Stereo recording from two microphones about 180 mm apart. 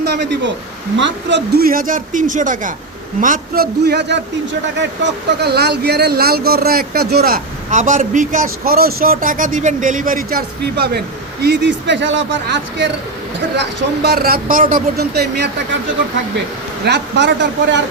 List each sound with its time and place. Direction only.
0.0 s speech: 65° right (ahead or behind)
0.9 s speech: 85° right
13.6 s speech: 65° right (ahead or behind)
16.8 s speech: 75° right (ahead or behind)